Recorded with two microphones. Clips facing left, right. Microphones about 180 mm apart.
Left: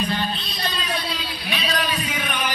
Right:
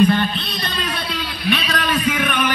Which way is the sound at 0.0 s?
60° right (ahead or behind).